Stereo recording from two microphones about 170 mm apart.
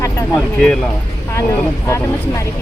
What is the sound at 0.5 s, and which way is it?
Speech, 5° left (ahead or behind).